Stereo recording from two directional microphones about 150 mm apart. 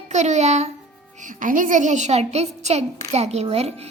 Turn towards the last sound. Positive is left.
turn(degrees=-45)  # may be behind; listen again after turning